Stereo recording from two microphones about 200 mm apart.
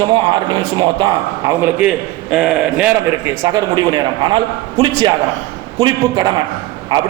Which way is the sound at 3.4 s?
20° right (ahead or behind).